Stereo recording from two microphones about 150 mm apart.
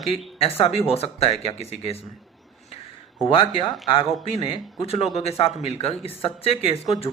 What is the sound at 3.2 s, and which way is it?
Speech, 30° left (ahead or behind).